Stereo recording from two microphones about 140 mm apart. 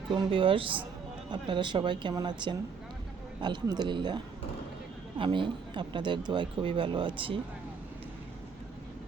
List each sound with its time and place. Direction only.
0.1 s speech: 35° right (ahead or behind)
3.4 s speech: 30° right (ahead or behind)